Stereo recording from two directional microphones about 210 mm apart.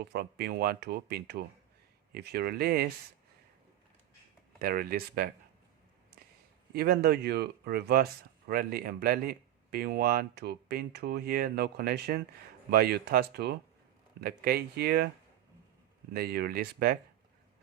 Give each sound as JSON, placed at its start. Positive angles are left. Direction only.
{"t": 0.0, "sound": "speech", "side_deg": -50}
{"t": 4.6, "sound": "speech", "side_deg": -45}
{"t": 6.7, "sound": "speech", "side_deg": -50}
{"t": 16.1, "sound": "speech", "side_deg": -45}